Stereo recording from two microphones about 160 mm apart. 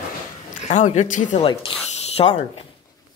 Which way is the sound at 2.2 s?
25° left (ahead or behind).